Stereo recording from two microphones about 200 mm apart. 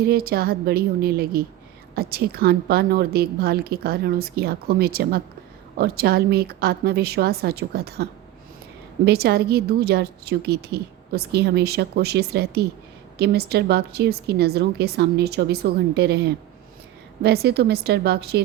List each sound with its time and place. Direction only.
0.0 s a woman's voice: 50° right (ahead or behind)
9.0 s a woman's voice: 50° right (ahead or behind)